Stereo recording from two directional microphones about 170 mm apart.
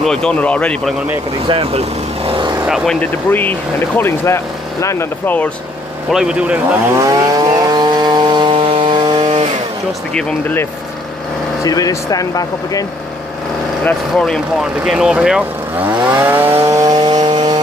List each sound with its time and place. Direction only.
0.0 s speech: 5° left (ahead or behind)
1.5 s speech: 35° right (ahead or behind)
2.6 s speech: centre (ahead or behind)
6.0 s speech: 5° right (ahead or behind)
7.0 s chainsaw: 20° right (ahead or behind)
10.1 s speech: 15° left (ahead or behind)
13.8 s speech: 5° left (ahead or behind); by 17.6 s 25° right (ahead or behind)